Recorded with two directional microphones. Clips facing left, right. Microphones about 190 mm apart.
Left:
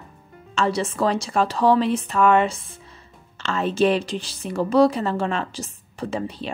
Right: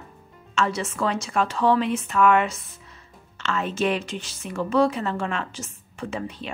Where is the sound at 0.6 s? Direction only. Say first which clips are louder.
Left 3 dB; 35° left (ahead or behind).